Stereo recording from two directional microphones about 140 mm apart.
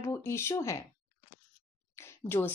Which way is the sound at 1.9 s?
20° left (ahead or behind).